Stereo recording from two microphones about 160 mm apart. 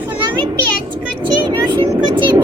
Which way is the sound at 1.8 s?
30° right (ahead or behind).